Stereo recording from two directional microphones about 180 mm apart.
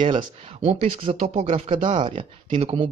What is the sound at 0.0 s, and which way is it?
Speech, 25° right (ahead or behind).